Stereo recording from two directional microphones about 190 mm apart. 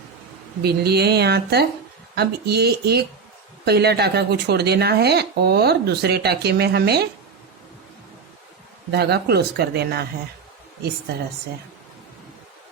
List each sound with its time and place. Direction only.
0.6 s speech: 55° right (ahead or behind)
8.9 s speech: 60° right (ahead or behind)